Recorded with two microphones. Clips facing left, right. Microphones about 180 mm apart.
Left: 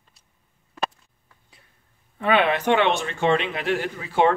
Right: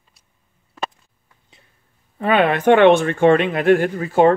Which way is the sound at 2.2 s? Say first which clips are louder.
Right 4 dB; 45° right (ahead or behind).